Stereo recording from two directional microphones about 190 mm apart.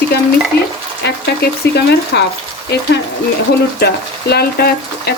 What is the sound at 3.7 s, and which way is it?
Speech, 60° left (ahead or behind).